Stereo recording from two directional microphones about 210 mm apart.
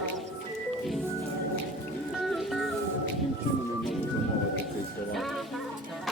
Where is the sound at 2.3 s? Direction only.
Centre (ahead or behind).